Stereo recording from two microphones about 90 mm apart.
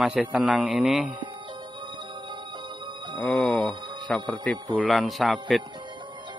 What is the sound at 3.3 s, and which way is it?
Speech, 5° left (ahead or behind).